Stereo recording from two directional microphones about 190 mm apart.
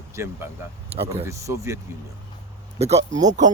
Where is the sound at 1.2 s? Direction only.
15° right (ahead or behind).